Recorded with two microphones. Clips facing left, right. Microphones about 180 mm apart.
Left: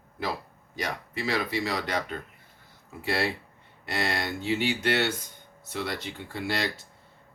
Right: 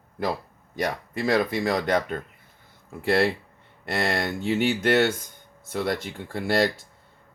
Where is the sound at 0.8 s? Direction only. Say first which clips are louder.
Right 6 dB; 50° right (ahead or behind).